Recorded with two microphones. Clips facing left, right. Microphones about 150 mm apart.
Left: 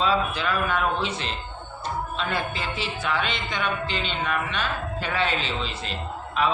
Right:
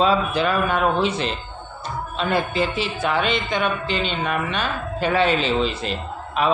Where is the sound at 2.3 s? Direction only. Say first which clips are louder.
Right 7 dB; 15° right (ahead or behind).